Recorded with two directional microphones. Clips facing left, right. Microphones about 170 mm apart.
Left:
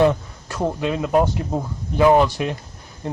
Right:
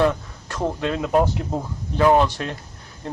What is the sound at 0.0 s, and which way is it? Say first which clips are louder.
Speech: left 3 dB; 15° left (ahead or behind).